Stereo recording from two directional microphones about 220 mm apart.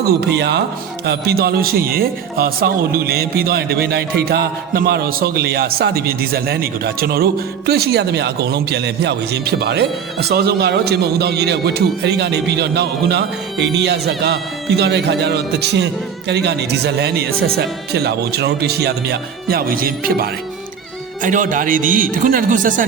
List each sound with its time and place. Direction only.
0.3 s speech: 50° right (ahead or behind)